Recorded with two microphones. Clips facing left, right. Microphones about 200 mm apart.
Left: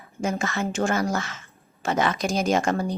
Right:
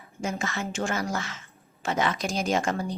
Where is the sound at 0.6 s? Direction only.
45° left (ahead or behind).